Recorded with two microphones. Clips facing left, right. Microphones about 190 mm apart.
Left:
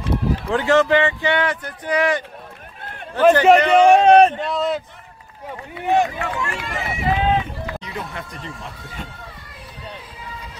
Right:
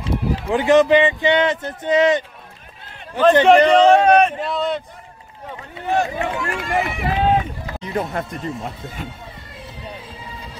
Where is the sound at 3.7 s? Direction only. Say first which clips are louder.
Even; 10° left (ahead or behind).